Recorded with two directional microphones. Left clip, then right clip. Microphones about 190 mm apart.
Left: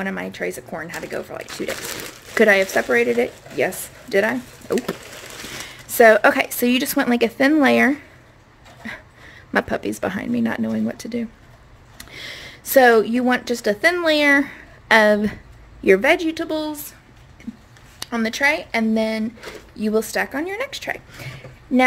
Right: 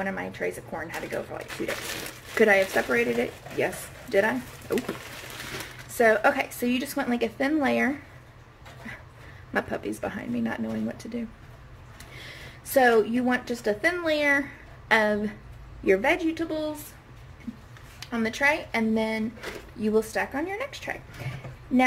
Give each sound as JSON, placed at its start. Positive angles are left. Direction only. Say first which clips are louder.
{"t": 0.0, "sound": "a woman's voice", "louder": "left 4 dB", "side_deg": 60}
{"t": 5.9, "sound": "a woman's voice", "louder": "left 9 dB", "side_deg": 60}
{"t": 8.8, "sound": "a sound", "louder": "left 8 dB", "side_deg": 55}
{"t": 9.5, "sound": "a woman's voice", "louder": "left 8 dB", "side_deg": 55}
{"t": 17.9, "sound": "a woman's voice", "louder": "left 6 dB", "side_deg": 55}